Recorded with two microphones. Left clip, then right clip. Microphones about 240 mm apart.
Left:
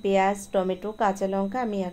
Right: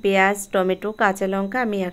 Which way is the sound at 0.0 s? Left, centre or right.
Right.